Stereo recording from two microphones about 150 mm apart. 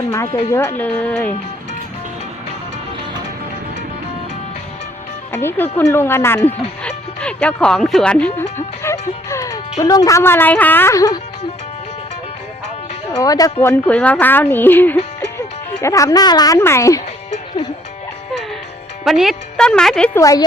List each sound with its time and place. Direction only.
0.5 s speech: 15° left (ahead or behind)
5.3 s speech: 15° left (ahead or behind)
13.1 s speech: 25° left (ahead or behind)
19.0 s speech: centre (ahead or behind)
20.1 s speech: 20° left (ahead or behind)